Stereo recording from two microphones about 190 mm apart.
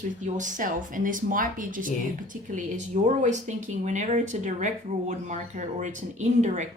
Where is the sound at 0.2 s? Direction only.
40° right (ahead or behind).